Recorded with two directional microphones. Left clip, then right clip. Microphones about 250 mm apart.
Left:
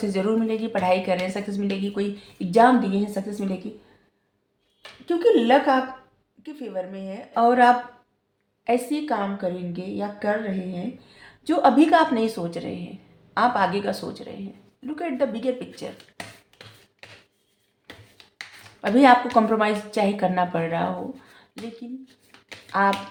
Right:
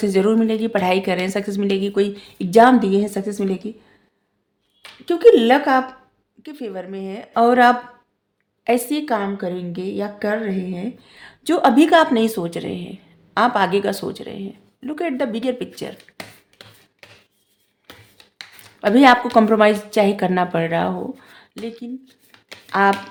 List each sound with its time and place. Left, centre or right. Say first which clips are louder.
0.0 s a woman's voice: right 7 dB; right
5.0 s a woman's voice: right 7 dB; right
18.8 s a woman's voice: right 3 dB; right
22.7 s a woman's voice: right 4 dB; right